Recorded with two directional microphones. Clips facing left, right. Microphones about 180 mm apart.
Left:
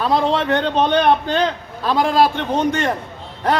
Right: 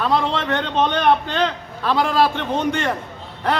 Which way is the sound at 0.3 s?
35° left (ahead or behind).